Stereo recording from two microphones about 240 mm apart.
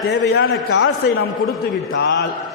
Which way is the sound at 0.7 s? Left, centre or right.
Left.